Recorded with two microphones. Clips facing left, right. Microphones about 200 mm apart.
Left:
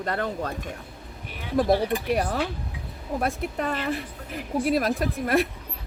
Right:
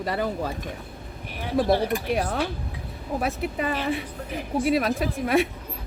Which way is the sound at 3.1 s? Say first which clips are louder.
Even; centre (ahead or behind).